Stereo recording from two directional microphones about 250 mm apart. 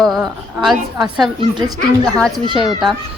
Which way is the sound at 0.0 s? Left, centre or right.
Centre.